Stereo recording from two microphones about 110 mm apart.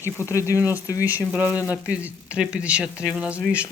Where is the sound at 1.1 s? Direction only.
15° right (ahead or behind).